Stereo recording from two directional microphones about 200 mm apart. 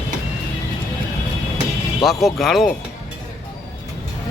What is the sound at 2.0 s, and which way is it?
Speech, centre (ahead or behind).